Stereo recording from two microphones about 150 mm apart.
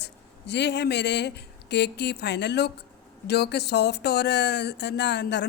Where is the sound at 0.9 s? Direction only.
90° left.